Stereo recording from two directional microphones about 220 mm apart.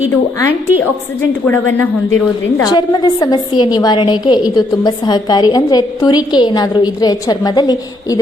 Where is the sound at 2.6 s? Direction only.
15° left (ahead or behind).